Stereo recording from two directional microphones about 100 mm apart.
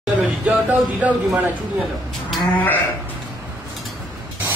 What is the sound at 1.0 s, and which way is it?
Speech, 15° right (ahead or behind).